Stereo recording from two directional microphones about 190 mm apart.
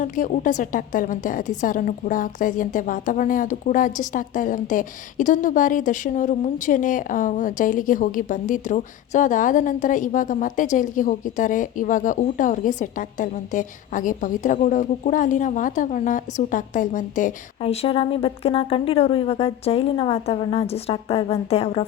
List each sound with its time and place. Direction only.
0.0 s a woman's voice: 45° left (ahead or behind)